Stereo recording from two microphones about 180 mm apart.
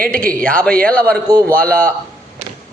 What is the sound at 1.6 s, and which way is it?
Speech, 10° left (ahead or behind).